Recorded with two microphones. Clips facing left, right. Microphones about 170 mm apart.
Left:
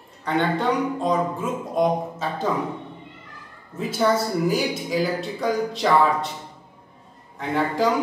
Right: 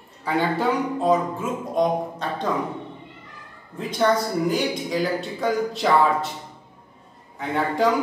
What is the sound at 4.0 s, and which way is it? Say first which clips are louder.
A woman's voice: even; 5° left (ahead or behind).